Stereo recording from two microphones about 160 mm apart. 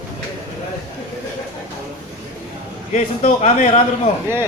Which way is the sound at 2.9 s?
50° left (ahead or behind).